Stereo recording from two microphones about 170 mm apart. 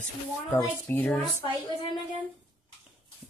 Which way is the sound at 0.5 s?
10° left (ahead or behind).